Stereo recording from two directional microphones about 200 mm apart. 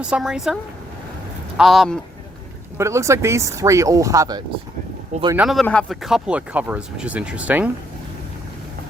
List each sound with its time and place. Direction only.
0.0 s speech: 5° right (ahead or behind)
2.7 s speech: 15° right (ahead or behind)
5.4 s speech: centre (ahead or behind)